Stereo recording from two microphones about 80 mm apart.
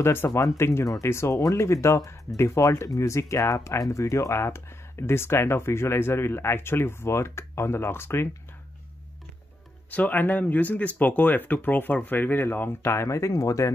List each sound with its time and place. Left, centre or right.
0.0 s speech: left
9.8 s speech: left